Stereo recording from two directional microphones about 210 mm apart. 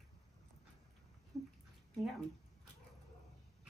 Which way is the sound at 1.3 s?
Centre (ahead or behind).